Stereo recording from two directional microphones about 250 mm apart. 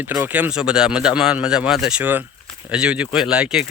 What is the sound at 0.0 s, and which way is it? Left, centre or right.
A man's voice, centre.